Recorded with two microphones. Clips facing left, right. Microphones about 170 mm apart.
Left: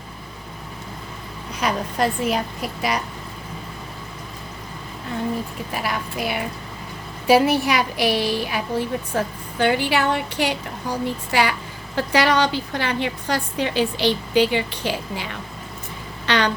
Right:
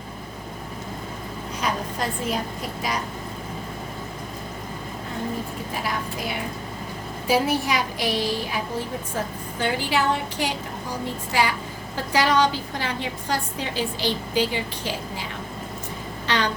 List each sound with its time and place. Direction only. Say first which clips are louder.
1.6 s a woman's voice: left 5 dB; 70° left (ahead or behind)
5.7 s a woman's voice: left 3 dB; 70° left (ahead or behind)